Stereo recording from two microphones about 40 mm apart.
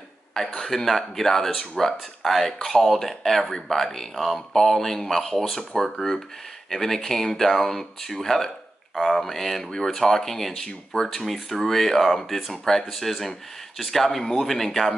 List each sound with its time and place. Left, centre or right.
0.6 s speech: centre
3.3 s speech: centre
10.9 s speech: centre
11.4 s speech: centre